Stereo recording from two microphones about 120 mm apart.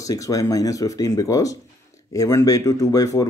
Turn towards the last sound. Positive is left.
turn(degrees=30)  # may be behind; listen again after turning